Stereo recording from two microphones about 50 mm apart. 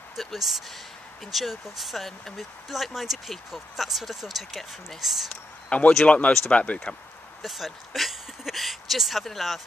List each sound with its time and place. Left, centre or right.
0.1 s speech: centre
5.7 s speech: left
7.4 s speech: centre